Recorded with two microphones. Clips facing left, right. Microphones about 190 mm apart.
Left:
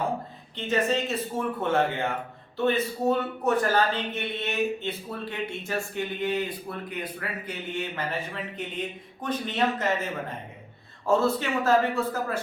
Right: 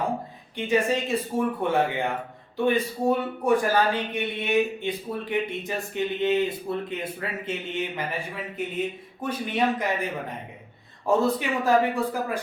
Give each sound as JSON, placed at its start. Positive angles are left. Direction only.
{"t": 0.5, "sound": "a man's voice", "side_deg": -10}
{"t": 8.6, "sound": "a man's voice", "side_deg": -10}